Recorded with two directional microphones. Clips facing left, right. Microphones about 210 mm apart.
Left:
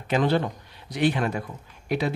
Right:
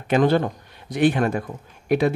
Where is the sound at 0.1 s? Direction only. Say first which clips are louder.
Right 5 dB; 50° right (ahead or behind).